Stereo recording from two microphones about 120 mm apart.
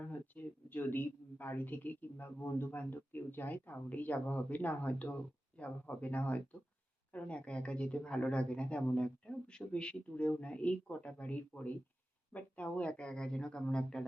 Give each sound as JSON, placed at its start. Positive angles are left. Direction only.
{"t": 0.0, "sound": "a woman's voice", "side_deg": 15}